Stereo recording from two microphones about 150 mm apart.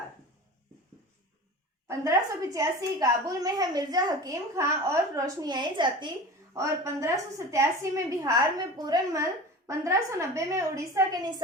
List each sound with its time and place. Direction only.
1.9 s a woman's voice: 20° right (ahead or behind)
6.5 s a woman's voice: 20° right (ahead or behind)